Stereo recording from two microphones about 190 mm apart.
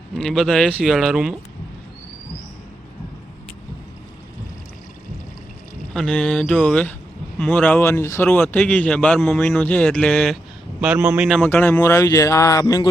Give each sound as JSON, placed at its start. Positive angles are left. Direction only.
{"t": 0.2, "sound": "speech", "side_deg": 0}
{"t": 5.9, "sound": "speech", "side_deg": 5}
{"t": 10.8, "sound": "speech", "side_deg": -5}
{"t": 11.4, "sound": "speech", "side_deg": 10}